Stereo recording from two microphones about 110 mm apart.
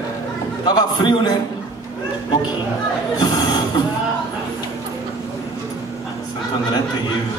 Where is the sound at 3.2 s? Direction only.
40° left (ahead or behind).